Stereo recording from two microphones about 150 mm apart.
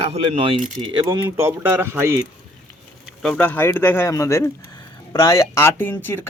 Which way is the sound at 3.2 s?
5° left (ahead or behind).